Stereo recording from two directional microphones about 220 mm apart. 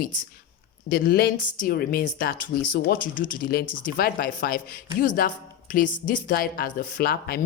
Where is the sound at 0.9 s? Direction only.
45° left (ahead or behind).